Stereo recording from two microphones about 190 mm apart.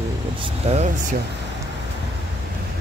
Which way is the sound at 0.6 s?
35° right (ahead or behind).